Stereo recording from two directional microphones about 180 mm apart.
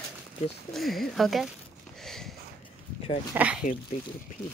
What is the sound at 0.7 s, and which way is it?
Speech, centre (ahead or behind).